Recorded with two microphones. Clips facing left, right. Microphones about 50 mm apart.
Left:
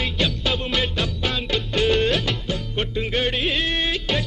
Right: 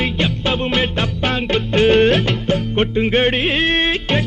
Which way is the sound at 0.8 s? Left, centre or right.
Right.